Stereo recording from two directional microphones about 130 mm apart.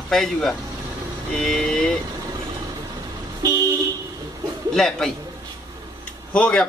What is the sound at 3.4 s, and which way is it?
Vehicle, 30° right (ahead or behind).